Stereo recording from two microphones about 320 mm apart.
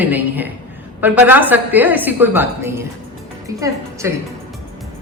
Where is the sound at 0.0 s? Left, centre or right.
Centre.